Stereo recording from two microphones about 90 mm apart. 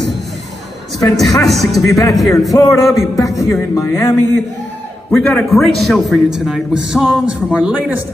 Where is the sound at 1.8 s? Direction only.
40° left (ahead or behind).